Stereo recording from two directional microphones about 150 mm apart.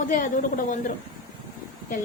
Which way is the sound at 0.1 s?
60° left (ahead or behind).